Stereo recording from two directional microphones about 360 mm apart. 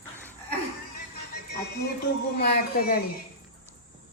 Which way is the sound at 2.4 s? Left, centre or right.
Left.